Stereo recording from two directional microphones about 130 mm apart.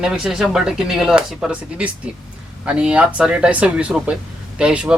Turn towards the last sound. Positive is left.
turn(degrees=-5)  # may be behind; listen again after turning